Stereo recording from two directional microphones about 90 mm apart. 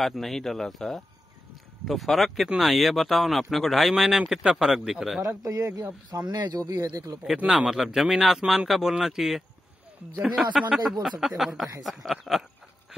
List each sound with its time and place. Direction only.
0.0 s speech: centre (ahead or behind)
5.2 s speech: 40° right (ahead or behind)
6.0 s speech: 50° right (ahead or behind)
7.3 s speech: 5° right (ahead or behind)